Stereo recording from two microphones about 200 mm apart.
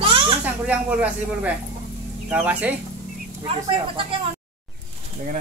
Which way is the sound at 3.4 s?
25° right (ahead or behind).